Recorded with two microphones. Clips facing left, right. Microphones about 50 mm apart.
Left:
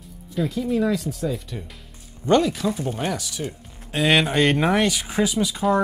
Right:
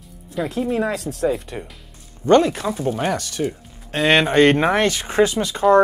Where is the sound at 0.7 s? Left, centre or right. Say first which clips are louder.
Even; right.